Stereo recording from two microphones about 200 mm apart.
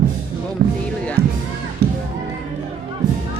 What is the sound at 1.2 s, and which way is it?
Speech, 50° right (ahead or behind).